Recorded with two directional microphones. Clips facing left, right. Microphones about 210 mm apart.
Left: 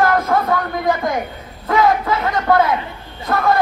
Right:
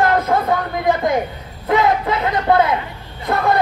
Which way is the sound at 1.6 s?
25° right (ahead or behind).